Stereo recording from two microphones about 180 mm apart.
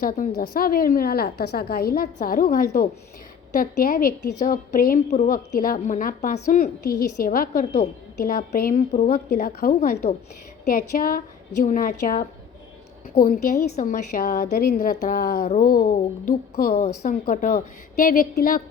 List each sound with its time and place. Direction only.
0.0 s a woman's voice: 50° left (ahead or behind)
8.9 s a woman's voice: 35° left (ahead or behind)
9.1 s a woman's voice: 55° left (ahead or behind)
13.7 s a woman's voice: 40° left (ahead or behind)
15.4 s a woman's voice: 40° left (ahead or behind)
16.8 s a woman's voice: 35° left (ahead or behind)
17.2 s a woman's voice: 50° left (ahead or behind)